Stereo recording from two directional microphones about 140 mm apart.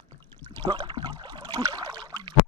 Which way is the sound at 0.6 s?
35° right (ahead or behind).